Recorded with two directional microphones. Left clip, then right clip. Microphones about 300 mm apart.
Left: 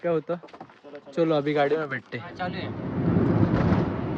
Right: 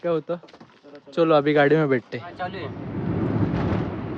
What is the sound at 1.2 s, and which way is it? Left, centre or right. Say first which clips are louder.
Speech: right 5 dB; right.